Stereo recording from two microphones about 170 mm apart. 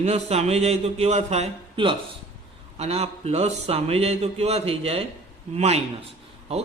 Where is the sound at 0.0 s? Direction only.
40° right (ahead or behind).